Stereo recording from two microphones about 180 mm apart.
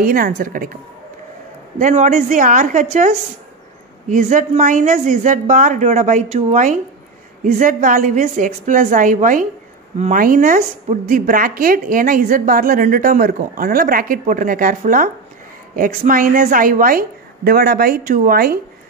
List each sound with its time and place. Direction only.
0.0 s a woman's voice: 55° right (ahead or behind)
1.8 s a woman's voice: 45° right (ahead or behind)